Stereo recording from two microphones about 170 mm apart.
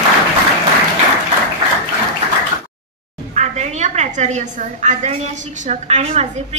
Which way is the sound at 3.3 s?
45° right (ahead or behind).